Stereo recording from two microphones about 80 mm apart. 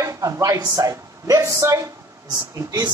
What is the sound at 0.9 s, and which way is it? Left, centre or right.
Speech, right.